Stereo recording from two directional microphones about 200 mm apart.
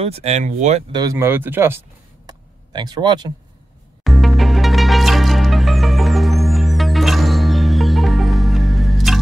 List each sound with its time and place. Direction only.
0.0 s speech: 30° right (ahead or behind)
0.9 s speech: 15° right (ahead or behind)
2.2 s a sound: 20° right (ahead or behind)
4.0 s music: centre (ahead or behind)